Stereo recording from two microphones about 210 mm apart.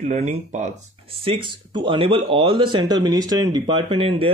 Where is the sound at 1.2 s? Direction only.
20° right (ahead or behind).